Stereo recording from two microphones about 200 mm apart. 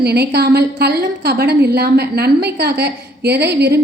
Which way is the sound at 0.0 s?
55° right (ahead or behind).